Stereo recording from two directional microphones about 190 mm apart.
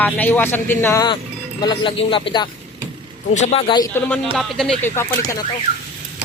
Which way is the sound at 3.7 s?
20° left (ahead or behind).